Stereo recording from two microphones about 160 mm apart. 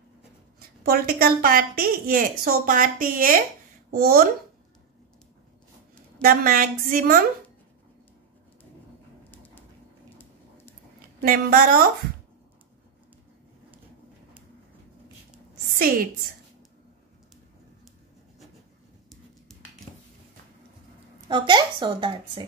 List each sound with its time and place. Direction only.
0.6 s a woman's voice: 70° right (ahead or behind)
6.2 s a woman's voice: 60° right (ahead or behind)
9.3 s bird: 10° left (ahead or behind)
11.0 s a woman's voice: 60° right (ahead or behind)
21.3 s a woman's voice: 30° right (ahead or behind)